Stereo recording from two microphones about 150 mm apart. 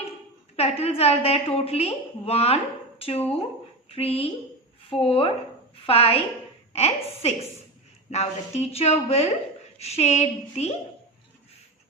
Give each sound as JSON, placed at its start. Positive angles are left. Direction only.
{"t": 0.5, "sound": "a woman's voice", "side_deg": 45}
{"t": 3.8, "sound": "a woman's voice", "side_deg": 40}